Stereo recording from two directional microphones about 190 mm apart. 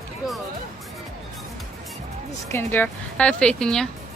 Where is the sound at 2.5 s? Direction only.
10° left (ahead or behind).